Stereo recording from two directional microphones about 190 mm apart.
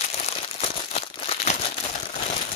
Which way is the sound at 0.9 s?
35° left (ahead or behind).